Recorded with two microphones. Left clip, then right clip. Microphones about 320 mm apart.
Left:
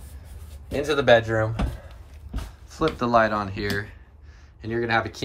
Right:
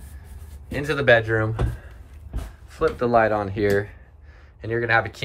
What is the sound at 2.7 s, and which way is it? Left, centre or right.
Speech, centre.